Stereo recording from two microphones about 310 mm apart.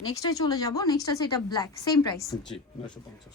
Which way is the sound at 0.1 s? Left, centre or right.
Centre.